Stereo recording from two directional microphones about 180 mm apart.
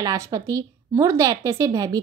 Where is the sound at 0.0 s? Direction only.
20° right (ahead or behind).